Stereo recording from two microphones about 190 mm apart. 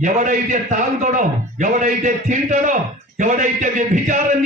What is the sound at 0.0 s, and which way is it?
A man's voice, 40° right (ahead or behind).